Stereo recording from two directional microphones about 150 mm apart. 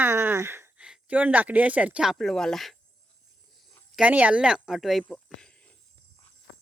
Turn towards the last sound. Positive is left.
turn(degrees=5)  # may be behind; listen again after turning